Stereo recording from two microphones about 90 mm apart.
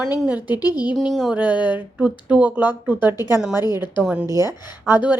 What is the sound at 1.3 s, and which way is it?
Speech, 20° right (ahead or behind).